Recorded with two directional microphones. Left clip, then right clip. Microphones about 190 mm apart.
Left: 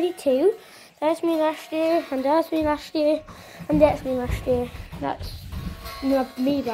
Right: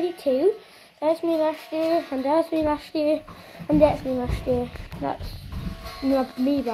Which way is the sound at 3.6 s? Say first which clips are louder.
Even; centre (ahead or behind).